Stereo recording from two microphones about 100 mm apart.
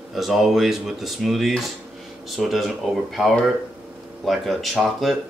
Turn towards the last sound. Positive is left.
turn(degrees=0)  # may be behind; listen again after turning